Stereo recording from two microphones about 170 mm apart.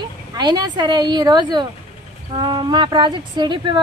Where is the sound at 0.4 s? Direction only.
25° right (ahead or behind).